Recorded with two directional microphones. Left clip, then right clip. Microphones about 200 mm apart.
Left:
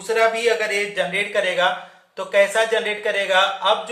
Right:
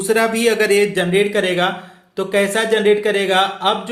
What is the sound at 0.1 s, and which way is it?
A man's voice, 50° right (ahead or behind).